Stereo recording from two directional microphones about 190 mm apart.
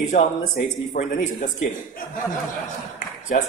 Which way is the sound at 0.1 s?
35° left (ahead or behind).